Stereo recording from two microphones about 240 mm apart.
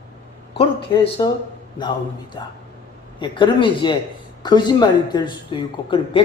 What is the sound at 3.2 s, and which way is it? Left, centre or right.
Speech, centre.